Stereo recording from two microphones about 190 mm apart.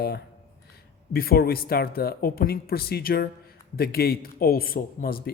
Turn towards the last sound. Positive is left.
turn(degrees=50)  # may be behind; listen again after turning